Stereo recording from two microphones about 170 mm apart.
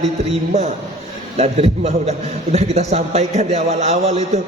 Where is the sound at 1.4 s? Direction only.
40° right (ahead or behind).